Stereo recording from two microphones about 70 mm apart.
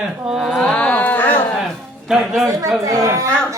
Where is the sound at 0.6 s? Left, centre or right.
Centre.